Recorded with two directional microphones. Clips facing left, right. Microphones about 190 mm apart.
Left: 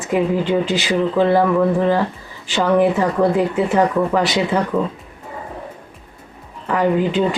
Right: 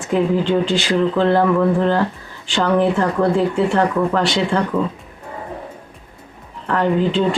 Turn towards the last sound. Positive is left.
turn(degrees=10)  # may be behind; listen again after turning